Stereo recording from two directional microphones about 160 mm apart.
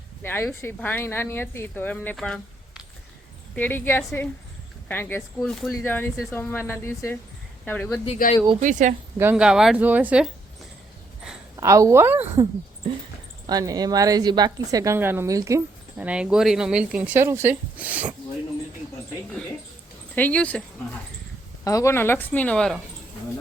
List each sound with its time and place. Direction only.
0.2 s speech: 15° left (ahead or behind)
3.5 s speech: 10° left (ahead or behind)
5.4 s speech: centre (ahead or behind)
5.8 s speech: 15° left (ahead or behind)
8.2 s speech: 65° left (ahead or behind)
8.6 s speech: 50° right (ahead or behind)
9.3 s speech: 5° right (ahead or behind)
11.5 s a woman's voice: 20° right (ahead or behind)
13.5 s a woman's voice: 25° right (ahead or behind)
16.0 s speech: 5° right (ahead or behind)
20.1 s speech: 10° left (ahead or behind)
21.6 s speech: 20° left (ahead or behind); by 22.8 s 5° left (ahead or behind)